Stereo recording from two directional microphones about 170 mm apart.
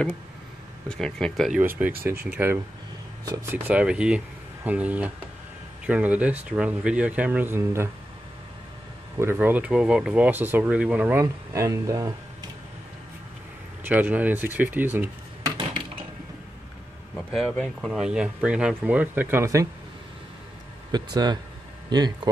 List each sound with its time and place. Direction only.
0.8 s speech: 5° left (ahead or behind)
1.6 s speech: 10° right (ahead or behind)
9.2 s speech: 10° right (ahead or behind)
13.8 s speech: 10° right (ahead or behind)
17.1 s speech: 5° left (ahead or behind); by 19.7 s 20° right (ahead or behind)
20.9 s speech: 25° right (ahead or behind)